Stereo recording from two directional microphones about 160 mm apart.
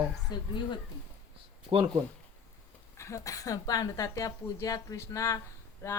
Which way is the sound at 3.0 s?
20° left (ahead or behind).